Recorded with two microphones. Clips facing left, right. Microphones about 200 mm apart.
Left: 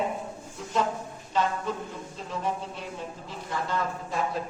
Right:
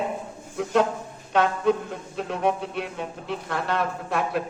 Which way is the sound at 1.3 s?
65° right (ahead or behind).